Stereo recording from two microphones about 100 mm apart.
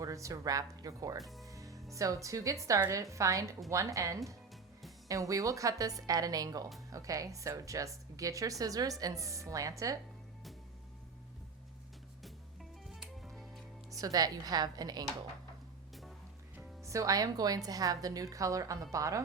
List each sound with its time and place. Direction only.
0.0 s a woman's voice: 30° right (ahead or behind)
1.2 s speech: centre (ahead or behind)
1.5 s a woman's voice: 35° right (ahead or behind)
12.9 s music: centre (ahead or behind)
13.9 s a woman's voice: 35° right (ahead or behind)
16.8 s a woman's voice: 35° right (ahead or behind)